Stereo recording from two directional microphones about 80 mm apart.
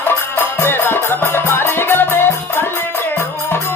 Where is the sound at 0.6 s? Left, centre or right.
Left.